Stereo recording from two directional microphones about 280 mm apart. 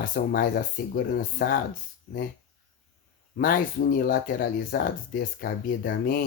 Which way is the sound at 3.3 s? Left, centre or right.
Left.